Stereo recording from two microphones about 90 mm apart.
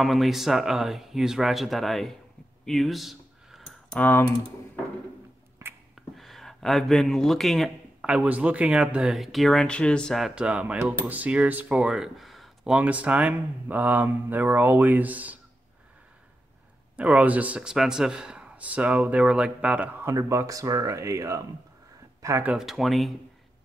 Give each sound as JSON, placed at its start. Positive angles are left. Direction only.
{"t": 0.0, "sound": "speech", "side_deg": 0}
{"t": 2.6, "sound": "a sound", "side_deg": 0}
{"t": 5.9, "sound": "speech", "side_deg": 0}
{"t": 8.0, "sound": "a man's voice", "side_deg": -10}
{"t": 10.3, "sound": "a man's voice", "side_deg": -15}
{"t": 12.7, "sound": "a man's voice", "side_deg": -15}
{"t": 16.9, "sound": "a man's voice", "side_deg": -15}
{"t": 20.0, "sound": "speech", "side_deg": -30}
{"t": 22.6, "sound": "speech", "side_deg": 0}